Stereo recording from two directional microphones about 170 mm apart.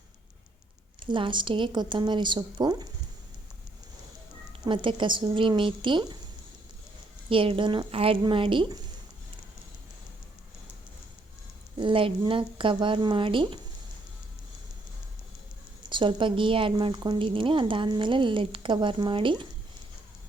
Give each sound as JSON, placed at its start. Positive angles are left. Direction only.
{"t": 0.9, "sound": "a woman's voice", "side_deg": -30}
{"t": 4.6, "sound": "a woman's voice", "side_deg": -30}
{"t": 7.3, "sound": "a woman's voice", "side_deg": -30}
{"t": 11.8, "sound": "a woman's voice", "side_deg": -30}
{"t": 15.9, "sound": "a woman's voice", "side_deg": -30}